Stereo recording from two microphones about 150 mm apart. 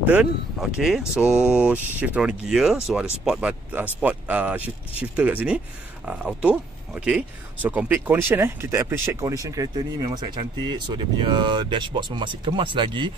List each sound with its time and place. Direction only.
0.0 s speech: 10° right (ahead or behind); by 13.1 s 35° right (ahead or behind)